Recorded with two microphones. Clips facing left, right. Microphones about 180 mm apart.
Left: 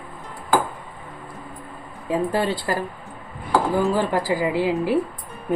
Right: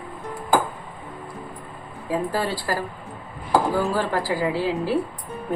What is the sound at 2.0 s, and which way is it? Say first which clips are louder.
A woman's voice: left 3 dB; 20° left (ahead or behind).